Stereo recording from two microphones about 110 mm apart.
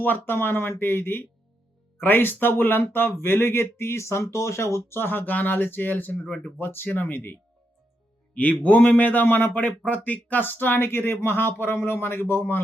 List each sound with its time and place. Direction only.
0.0 s speech: 20° left (ahead or behind)
6.6 s speech: 20° left (ahead or behind)
8.4 s speech: 15° left (ahead or behind)